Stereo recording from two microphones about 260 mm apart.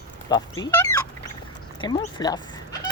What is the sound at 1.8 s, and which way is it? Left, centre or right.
Speech, centre.